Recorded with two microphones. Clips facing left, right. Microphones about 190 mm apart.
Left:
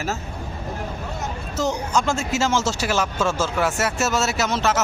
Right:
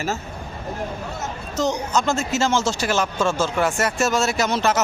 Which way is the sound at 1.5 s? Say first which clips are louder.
Right 1 dB; 10° left (ahead or behind).